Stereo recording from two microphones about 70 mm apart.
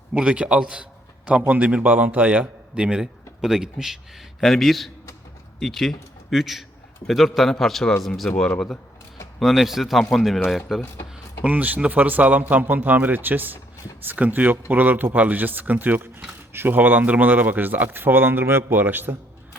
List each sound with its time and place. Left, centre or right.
0.1 s a man's voice: centre
4.4 s speech: centre
11.4 s speech: right